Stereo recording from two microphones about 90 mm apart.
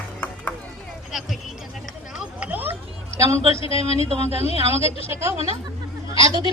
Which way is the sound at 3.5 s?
90° left.